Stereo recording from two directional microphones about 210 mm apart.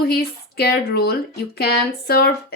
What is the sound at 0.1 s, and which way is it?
Speech, 50° left (ahead or behind).